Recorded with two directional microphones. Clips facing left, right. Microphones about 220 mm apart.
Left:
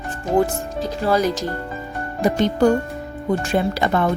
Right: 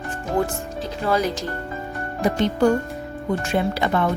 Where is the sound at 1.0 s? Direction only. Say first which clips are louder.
Left 2 dB; 35° left (ahead or behind).